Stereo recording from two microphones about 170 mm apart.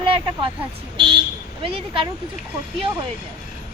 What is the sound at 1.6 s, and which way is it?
Speech, 30° right (ahead or behind).